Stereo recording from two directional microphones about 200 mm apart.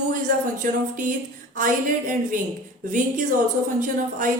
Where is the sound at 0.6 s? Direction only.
45° right (ahead or behind).